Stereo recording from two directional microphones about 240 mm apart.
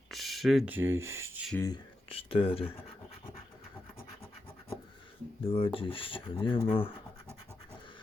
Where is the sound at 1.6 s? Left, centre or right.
Centre.